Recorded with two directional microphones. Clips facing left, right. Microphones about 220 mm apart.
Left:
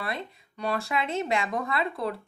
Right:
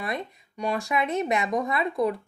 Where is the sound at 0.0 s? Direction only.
15° right (ahead or behind).